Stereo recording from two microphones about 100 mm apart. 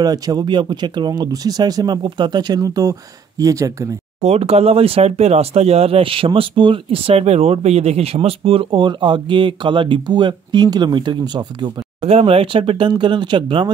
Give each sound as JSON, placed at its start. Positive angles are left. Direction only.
{"t": 0.0, "sound": "speech", "side_deg": -40}
{"t": 0.5, "sound": "speech", "side_deg": -50}
{"t": 4.2, "sound": "speech", "side_deg": -90}
{"t": 12.0, "sound": "speech", "side_deg": -85}